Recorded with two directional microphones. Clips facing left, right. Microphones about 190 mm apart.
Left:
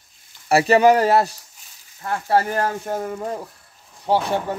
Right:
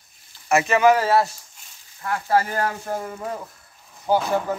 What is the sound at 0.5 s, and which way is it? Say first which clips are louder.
Speech: left 3 dB; 35° left (ahead or behind).